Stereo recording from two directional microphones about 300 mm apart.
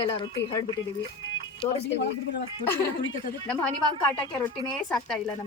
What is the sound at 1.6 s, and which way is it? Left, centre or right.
Speech, centre.